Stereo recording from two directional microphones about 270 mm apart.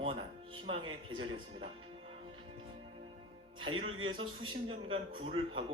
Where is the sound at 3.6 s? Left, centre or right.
Centre.